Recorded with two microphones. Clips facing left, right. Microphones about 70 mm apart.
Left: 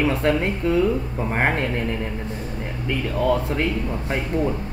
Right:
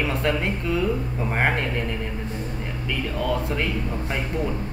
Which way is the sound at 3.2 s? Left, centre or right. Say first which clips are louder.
Left 5 dB; left.